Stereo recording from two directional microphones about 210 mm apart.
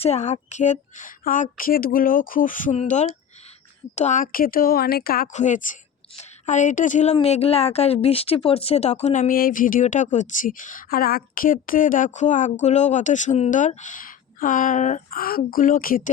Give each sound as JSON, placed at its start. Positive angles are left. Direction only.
{"t": 0.0, "sound": "a woman's voice", "side_deg": 30}